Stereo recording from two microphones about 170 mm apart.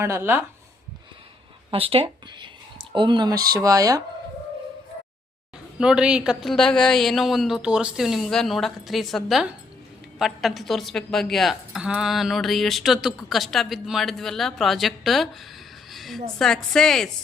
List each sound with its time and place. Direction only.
0.0 s speech: 15° right (ahead or behind)
1.7 s speech: 35° right (ahead or behind)
5.8 s speech: 5° right (ahead or behind)
15.9 s a sound: centre (ahead or behind)
16.4 s speech: 5° left (ahead or behind)